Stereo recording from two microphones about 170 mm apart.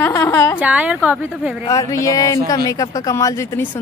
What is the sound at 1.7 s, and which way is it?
A woman's voice, 20° left (ahead or behind).